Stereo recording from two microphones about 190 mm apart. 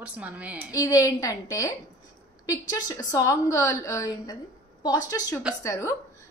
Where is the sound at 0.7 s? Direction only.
20° left (ahead or behind).